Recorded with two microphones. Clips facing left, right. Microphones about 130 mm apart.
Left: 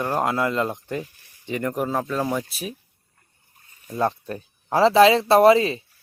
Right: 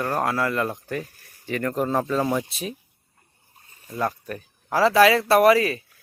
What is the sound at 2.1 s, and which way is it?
Speech, centre (ahead or behind).